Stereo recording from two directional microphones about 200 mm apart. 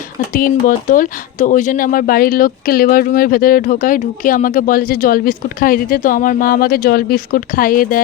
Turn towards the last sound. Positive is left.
turn(degrees=45)  # may be behind; listen again after turning